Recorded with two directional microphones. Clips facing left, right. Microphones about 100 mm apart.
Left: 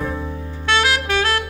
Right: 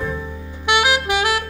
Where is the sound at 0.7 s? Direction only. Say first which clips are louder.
Right 1 dB; 15° right (ahead or behind).